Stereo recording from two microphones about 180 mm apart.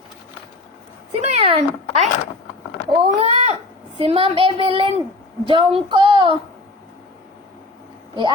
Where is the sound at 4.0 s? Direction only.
30° right (ahead or behind).